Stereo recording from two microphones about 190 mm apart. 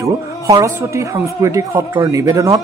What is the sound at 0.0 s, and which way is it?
A woman's voice, 15° right (ahead or behind).